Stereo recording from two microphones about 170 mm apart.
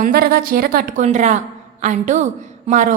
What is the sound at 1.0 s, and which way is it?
A woman's voice, 45° right (ahead or behind).